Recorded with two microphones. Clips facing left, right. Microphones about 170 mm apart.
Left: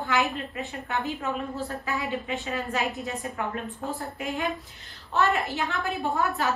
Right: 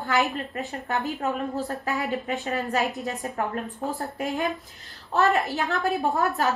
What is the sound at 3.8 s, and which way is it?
A woman's voice, 40° right (ahead or behind).